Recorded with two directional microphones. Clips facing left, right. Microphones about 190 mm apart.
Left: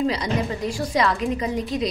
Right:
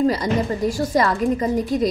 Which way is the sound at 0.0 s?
50° right (ahead or behind).